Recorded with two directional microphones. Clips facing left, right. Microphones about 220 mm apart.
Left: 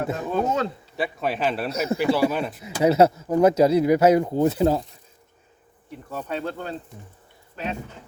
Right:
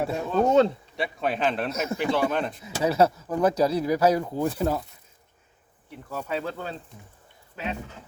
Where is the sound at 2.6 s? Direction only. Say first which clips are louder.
Left 5 dB; 25° left (ahead or behind).